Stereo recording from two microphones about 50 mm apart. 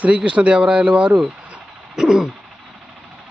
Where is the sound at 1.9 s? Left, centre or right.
Centre.